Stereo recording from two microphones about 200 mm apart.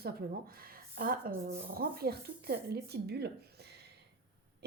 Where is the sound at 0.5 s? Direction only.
50° right (ahead or behind).